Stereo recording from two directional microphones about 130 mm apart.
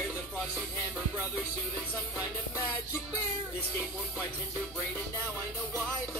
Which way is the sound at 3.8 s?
10° right (ahead or behind).